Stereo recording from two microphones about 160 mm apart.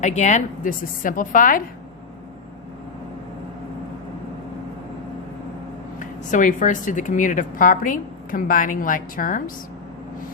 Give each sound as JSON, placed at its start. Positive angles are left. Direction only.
{"t": 0.0, "sound": "speech", "side_deg": 45}
{"t": 6.0, "sound": "speech", "side_deg": 55}